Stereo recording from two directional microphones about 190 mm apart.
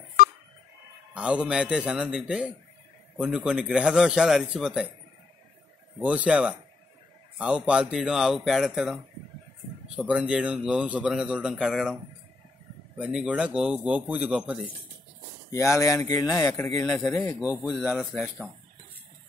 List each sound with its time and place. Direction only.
1.1 s speech: 5° right (ahead or behind)
5.9 s speech: 5° right (ahead or behind)
15.5 s speech: 15° left (ahead or behind)
16.3 s speech: 5° left (ahead or behind)
17.4 s speech: centre (ahead or behind)